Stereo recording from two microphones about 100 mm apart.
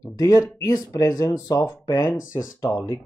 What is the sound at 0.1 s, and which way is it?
Speech, 35° left (ahead or behind).